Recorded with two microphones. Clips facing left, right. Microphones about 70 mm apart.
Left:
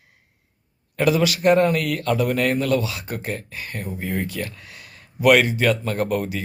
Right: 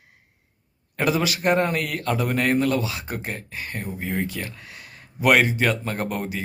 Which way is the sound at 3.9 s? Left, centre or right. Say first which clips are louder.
Left 1 dB; centre.